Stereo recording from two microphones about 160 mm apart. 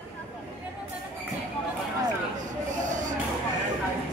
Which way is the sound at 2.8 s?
50° right (ahead or behind).